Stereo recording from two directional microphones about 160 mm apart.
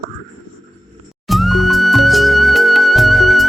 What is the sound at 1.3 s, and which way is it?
Music, centre (ahead or behind).